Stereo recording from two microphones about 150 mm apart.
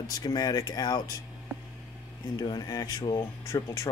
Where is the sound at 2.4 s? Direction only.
25° left (ahead or behind).